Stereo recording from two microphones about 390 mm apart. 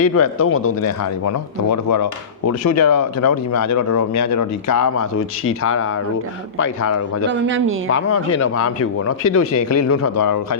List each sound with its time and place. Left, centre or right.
0.0 s speech: left
7.3 s speech: right
7.9 s speech: left